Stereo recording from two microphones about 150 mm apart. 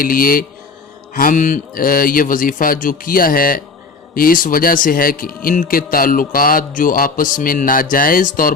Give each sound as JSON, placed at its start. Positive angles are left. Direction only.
{"t": 0.0, "sound": "speech", "side_deg": 70}